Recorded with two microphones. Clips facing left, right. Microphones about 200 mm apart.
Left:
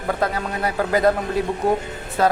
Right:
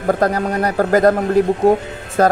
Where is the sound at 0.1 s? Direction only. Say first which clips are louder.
Right 7 dB; 45° right (ahead or behind).